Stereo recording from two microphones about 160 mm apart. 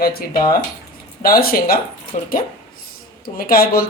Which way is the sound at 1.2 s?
65° left (ahead or behind).